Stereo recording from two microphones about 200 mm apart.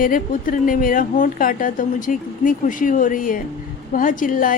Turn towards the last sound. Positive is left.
turn(degrees=40)  # may be behind; listen again after turning